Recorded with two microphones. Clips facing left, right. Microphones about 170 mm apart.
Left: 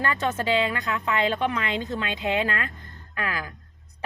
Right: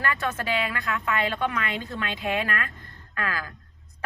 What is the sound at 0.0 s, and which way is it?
A woman's voice, 25° left (ahead or behind).